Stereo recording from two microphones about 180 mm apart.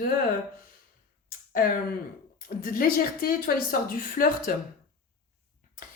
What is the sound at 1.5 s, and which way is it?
A woman's voice, 55° left (ahead or behind).